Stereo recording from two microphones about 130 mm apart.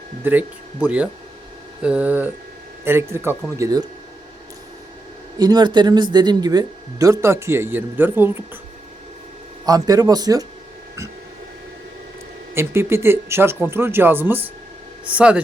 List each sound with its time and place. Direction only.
0.3 s speech: 10° right (ahead or behind); by 3.8 s 30° right (ahead or behind)
5.4 s speech: 30° right (ahead or behind); by 8.4 s 15° right (ahead or behind)
9.6 s speech: 30° right (ahead or behind)
12.5 s speech: 20° right (ahead or behind)